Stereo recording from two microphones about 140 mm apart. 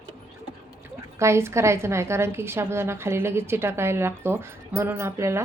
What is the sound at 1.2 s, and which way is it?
Speech, 20° right (ahead or behind).